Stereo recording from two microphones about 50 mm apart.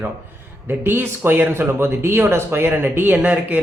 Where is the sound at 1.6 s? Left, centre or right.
Right.